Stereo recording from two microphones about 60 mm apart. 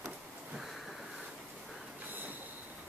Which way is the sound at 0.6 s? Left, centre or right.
Centre.